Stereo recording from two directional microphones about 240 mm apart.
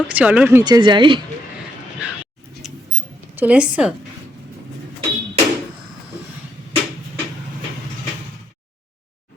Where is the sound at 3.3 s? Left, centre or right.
Centre.